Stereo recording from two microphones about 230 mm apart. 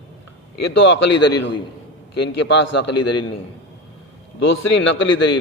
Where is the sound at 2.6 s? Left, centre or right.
Left.